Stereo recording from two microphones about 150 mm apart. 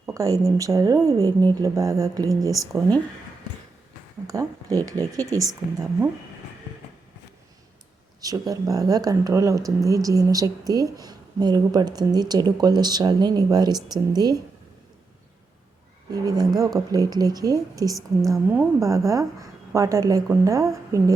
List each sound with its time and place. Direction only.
0.1 s a woman's voice: 20° right (ahead or behind)
4.3 s a woman's voice: 25° right (ahead or behind)
8.2 s a woman's voice: 25° right (ahead or behind)
16.1 s a woman's voice: 25° right (ahead or behind)